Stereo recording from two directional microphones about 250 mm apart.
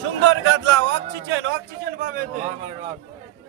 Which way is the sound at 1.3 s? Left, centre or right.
Right.